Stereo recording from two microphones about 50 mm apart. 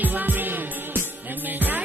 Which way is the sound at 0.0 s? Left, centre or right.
Right.